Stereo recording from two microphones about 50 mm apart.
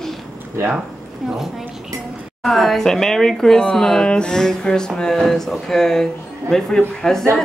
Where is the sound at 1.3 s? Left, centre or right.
Centre.